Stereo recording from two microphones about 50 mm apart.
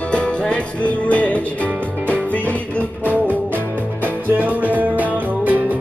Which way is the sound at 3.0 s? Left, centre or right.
Right.